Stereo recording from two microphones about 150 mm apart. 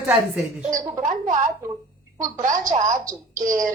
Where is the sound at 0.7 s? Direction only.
60° right (ahead or behind).